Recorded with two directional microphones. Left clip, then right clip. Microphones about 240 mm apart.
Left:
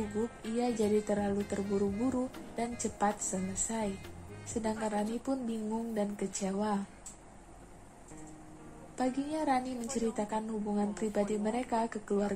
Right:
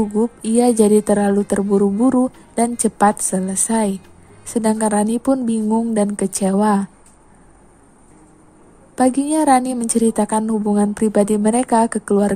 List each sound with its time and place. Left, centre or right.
0.2 s a woman's voice: right
8.9 s a woman's voice: right